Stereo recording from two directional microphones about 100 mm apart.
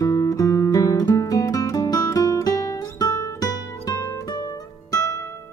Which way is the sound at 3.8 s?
30° left (ahead or behind).